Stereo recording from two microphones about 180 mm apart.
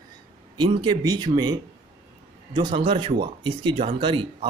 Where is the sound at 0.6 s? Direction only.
25° right (ahead or behind).